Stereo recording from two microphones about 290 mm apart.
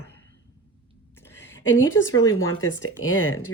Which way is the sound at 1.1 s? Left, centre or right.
Centre.